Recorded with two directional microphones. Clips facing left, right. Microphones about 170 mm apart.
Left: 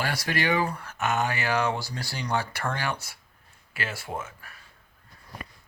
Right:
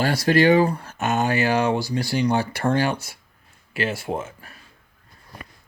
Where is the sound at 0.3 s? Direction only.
30° right (ahead or behind).